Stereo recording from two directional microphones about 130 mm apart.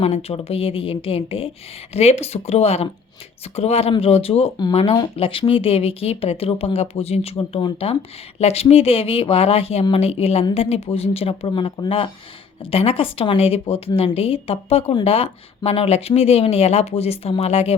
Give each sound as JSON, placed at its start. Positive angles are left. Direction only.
{"t": 0.0, "sound": "speech", "side_deg": 50}